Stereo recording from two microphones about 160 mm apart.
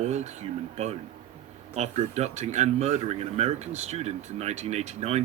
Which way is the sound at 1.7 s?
45° right (ahead or behind).